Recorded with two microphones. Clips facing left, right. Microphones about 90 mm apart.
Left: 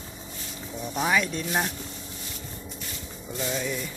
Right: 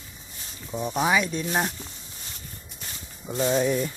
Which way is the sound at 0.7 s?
25° right (ahead or behind).